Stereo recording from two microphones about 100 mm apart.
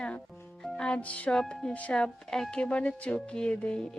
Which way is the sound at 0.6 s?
10° left (ahead or behind).